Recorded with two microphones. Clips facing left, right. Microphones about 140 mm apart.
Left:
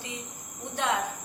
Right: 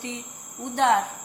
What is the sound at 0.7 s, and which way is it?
Speech, 70° right (ahead or behind).